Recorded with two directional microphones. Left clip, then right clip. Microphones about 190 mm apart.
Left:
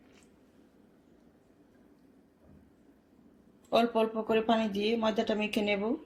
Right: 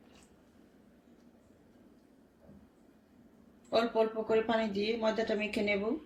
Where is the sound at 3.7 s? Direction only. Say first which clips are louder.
Left 2 dB; 35° left (ahead or behind).